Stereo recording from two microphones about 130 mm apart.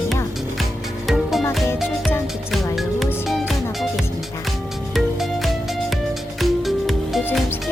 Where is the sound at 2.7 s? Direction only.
Centre (ahead or behind).